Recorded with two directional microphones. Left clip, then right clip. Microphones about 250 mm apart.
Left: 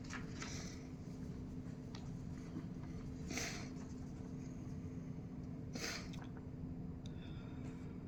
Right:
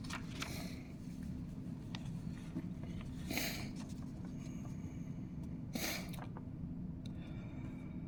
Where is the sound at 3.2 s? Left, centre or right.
Right.